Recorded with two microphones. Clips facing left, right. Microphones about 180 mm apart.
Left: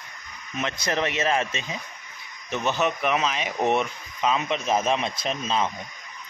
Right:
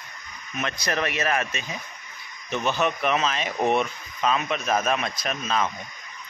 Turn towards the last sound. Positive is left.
turn(degrees=25)  # may be behind; listen again after turning